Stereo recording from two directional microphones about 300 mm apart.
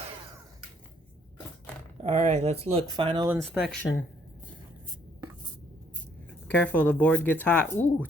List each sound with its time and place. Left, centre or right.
2.0 s speech: right
3.5 s speech: centre
6.5 s speech: centre